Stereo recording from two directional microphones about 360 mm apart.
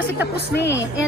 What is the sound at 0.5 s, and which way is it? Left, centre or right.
Speech, left.